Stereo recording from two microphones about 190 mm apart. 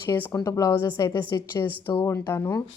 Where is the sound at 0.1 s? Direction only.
10° left (ahead or behind).